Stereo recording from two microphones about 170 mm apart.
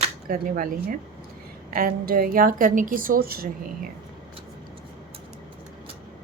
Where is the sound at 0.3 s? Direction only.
55° right (ahead or behind).